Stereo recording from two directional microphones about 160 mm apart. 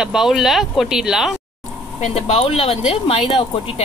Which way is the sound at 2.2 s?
40° left (ahead or behind).